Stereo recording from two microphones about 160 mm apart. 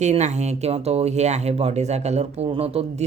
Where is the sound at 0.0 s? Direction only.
45° right (ahead or behind).